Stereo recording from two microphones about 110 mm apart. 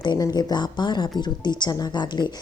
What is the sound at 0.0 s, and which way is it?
A woman's voice, 40° left (ahead or behind).